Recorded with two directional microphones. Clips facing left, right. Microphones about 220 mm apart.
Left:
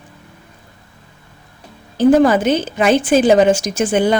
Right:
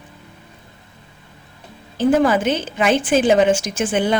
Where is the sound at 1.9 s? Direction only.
40° left (ahead or behind).